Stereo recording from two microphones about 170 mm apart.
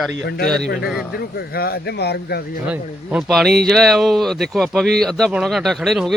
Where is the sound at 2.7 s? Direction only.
5° right (ahead or behind).